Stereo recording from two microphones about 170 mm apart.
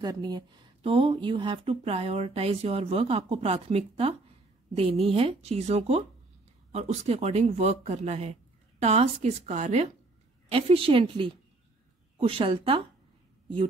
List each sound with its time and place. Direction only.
0.0 s speech: 25° right (ahead or behind)